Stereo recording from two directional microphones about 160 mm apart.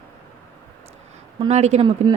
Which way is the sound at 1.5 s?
45° right (ahead or behind).